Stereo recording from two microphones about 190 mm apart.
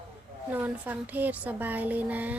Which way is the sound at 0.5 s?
10° right (ahead or behind).